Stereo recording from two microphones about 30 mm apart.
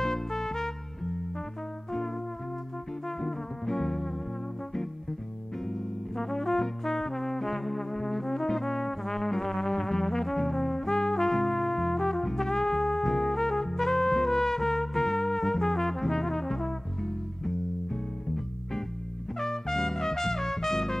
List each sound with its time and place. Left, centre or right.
0.0 s trumpet: centre
3.1 s music: centre
5.7 s brass instrument: centre
18.3 s music: centre
19.4 s trumpet: centre